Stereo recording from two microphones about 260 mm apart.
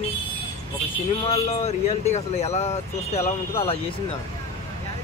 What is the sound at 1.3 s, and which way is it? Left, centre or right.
Speech, left.